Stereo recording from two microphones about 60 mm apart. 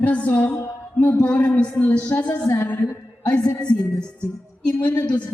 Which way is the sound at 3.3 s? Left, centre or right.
Centre.